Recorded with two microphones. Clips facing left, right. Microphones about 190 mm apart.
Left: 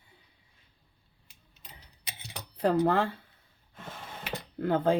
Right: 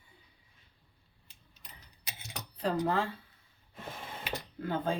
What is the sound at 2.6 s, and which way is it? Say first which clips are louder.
Speech: left 6 dB; 60° left (ahead or behind).